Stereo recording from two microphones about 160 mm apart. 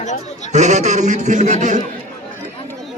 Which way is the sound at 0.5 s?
45° right (ahead or behind).